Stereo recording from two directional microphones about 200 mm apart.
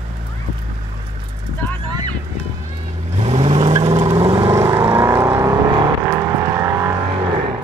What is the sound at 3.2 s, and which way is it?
Vehicle, 30° right (ahead or behind).